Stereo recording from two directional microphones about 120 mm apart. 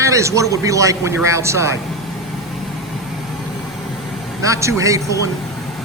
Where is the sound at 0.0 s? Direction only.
25° right (ahead or behind).